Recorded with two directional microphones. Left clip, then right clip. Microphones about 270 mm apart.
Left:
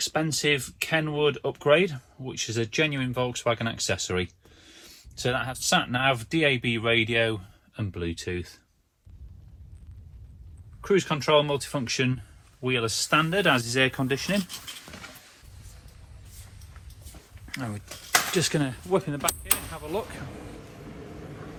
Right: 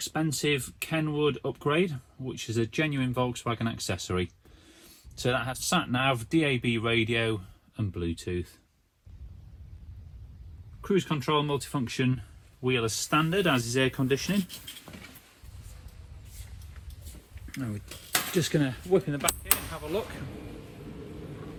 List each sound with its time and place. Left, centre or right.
0.1 s speech: centre
10.8 s speech: centre
17.6 s speech: centre
20.9 s vehicle: centre